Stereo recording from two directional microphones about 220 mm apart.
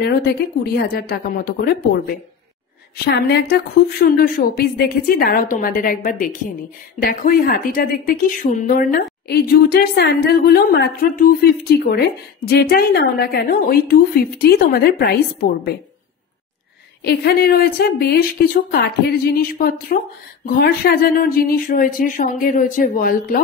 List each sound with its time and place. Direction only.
0.0 s a woman's voice: 45° left (ahead or behind)
3.1 s a woman's voice: 45° left (ahead or behind)
17.0 s a woman's voice: 45° left (ahead or behind)